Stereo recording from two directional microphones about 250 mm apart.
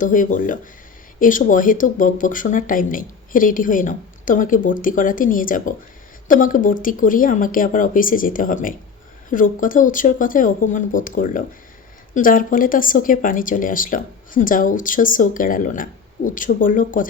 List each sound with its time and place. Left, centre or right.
0.0 s speech: left